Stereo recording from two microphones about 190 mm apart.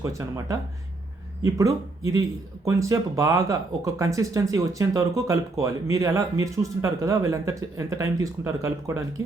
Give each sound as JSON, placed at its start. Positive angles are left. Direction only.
{"t": 0.0, "sound": "speech", "side_deg": -15}